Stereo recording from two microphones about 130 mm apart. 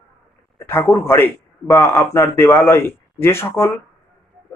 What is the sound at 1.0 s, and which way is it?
A man's voice, 20° left (ahead or behind).